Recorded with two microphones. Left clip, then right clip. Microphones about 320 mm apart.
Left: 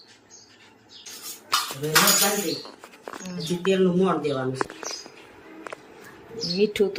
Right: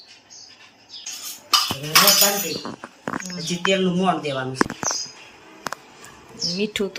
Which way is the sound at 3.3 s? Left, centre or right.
Centre.